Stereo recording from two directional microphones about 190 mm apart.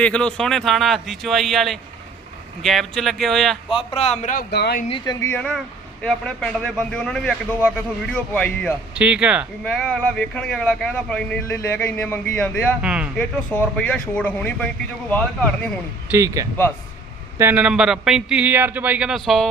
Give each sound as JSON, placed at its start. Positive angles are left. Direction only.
{"t": 0.0, "sound": "speech", "side_deg": 5}
{"t": 3.7, "sound": "a man's voice", "side_deg": 30}
{"t": 4.5, "sound": "speech", "side_deg": 60}
{"t": 4.9, "sound": "speech", "side_deg": 25}
{"t": 5.2, "sound": "speech", "side_deg": 10}
{"t": 9.0, "sound": "speech", "side_deg": -5}
{"t": 9.6, "sound": "speech", "side_deg": 5}
{"t": 12.8, "sound": "speech", "side_deg": -5}
{"t": 13.1, "sound": "speech", "side_deg": 10}
{"t": 16.1, "sound": "speech", "side_deg": -15}